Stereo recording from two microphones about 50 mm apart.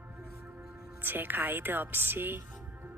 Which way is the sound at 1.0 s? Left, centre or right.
Right.